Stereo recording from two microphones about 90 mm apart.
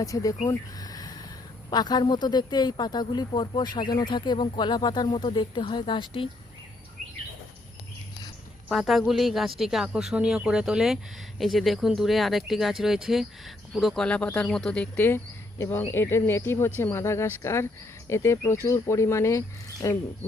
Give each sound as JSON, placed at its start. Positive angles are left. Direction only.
{"t": 0.0, "sound": "a sound", "side_deg": 40}
{"t": 1.7, "sound": "speech", "side_deg": 50}
{"t": 8.7, "sound": "speech", "side_deg": 0}